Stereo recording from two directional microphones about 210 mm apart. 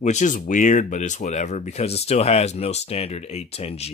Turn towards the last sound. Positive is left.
turn(degrees=30)  # may be behind; listen again after turning